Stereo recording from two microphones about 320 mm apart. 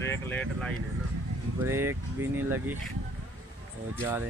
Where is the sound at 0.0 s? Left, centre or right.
Centre.